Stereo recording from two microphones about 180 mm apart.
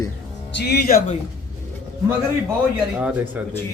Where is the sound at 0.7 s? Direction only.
60° left (ahead or behind).